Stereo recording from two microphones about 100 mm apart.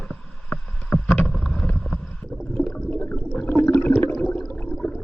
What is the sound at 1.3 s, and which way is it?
Vehicle, 5° left (ahead or behind).